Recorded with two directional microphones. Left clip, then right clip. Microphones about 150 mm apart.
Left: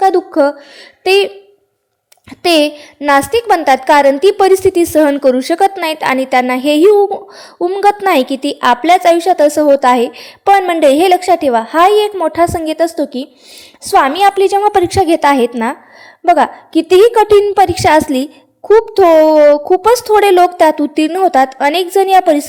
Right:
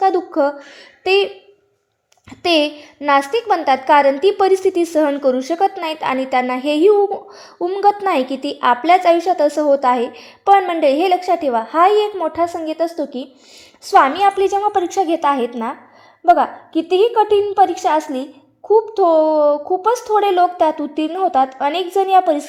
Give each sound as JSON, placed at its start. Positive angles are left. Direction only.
{"t": 0.0, "sound": "a sound", "side_deg": 20}
{"t": 1.0, "sound": "a woman's voice", "side_deg": 20}
{"t": 2.3, "sound": "a woman's voice", "side_deg": 20}